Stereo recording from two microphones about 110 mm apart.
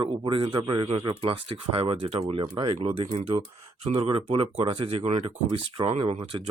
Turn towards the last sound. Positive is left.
turn(degrees=-60)  # may be behind; listen again after turning